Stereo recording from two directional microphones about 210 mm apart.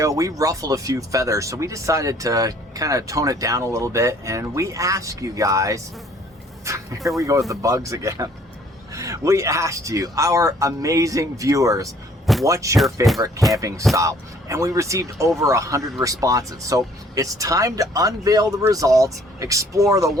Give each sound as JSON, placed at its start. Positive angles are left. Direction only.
{"t": 0.0, "sound": "speech", "side_deg": -15}
{"t": 12.2, "sound": "a sound", "side_deg": 0}
{"t": 12.5, "sound": "speech", "side_deg": -15}